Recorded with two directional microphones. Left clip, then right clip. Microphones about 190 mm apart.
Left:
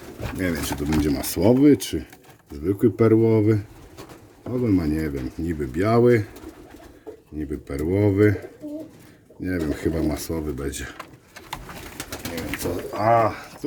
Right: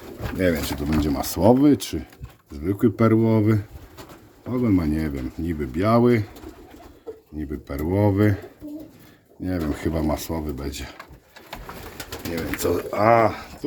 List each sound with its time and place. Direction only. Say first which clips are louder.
0.3 s speech: right 5 dB; 15° right (ahead or behind)
0.7 s speech: left 1 dB; centre (ahead or behind)
4.6 s speech: even; 10° right (ahead or behind)
7.3 s speech: left 2 dB; 10° right (ahead or behind)
9.4 s speech: left 1 dB; 10° right (ahead or behind)
12.6 s speech: right 3 dB; 25° right (ahead or behind)
13.2 s speech: right 2 dB; centre (ahead or behind)